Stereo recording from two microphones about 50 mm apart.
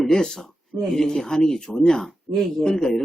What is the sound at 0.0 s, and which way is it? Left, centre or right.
Speech, centre.